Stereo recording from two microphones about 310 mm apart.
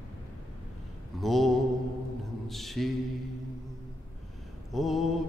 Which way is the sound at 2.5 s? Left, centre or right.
Centre.